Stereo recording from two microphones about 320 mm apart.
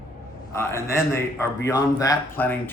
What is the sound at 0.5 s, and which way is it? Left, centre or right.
Speech, centre.